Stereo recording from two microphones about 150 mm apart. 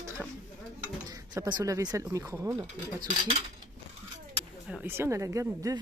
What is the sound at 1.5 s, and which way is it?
Speech, 25° right (ahead or behind).